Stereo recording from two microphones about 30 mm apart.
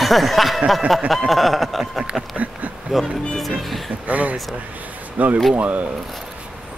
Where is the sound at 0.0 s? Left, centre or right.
Centre.